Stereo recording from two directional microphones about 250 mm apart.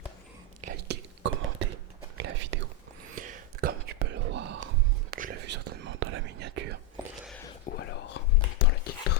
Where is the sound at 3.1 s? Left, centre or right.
Right.